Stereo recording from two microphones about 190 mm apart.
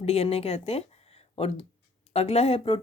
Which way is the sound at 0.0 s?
35° left (ahead or behind).